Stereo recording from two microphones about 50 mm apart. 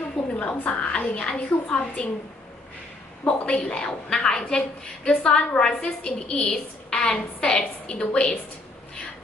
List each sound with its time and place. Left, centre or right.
0.3 s a woman's voice: left
3.2 s a woman's voice: left